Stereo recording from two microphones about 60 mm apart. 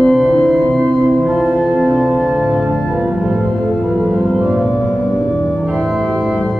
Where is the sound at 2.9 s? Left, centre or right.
Centre.